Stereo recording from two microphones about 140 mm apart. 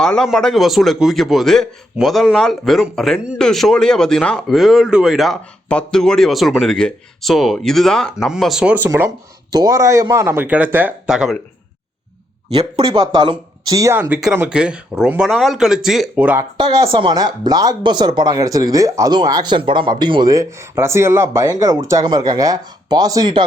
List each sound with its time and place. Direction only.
0.0 s a man's voice: 5° left (ahead or behind); by 9.0 s 15° right (ahead or behind)
9.0 s speech: 25° right (ahead or behind); by 11.3 s 5° right (ahead or behind)
12.5 s speech: 40° right (ahead or behind); by 14.1 s 20° right (ahead or behind)
14.1 s a man's voice: 5° right (ahead or behind)
16.4 s speech: 30° right (ahead or behind)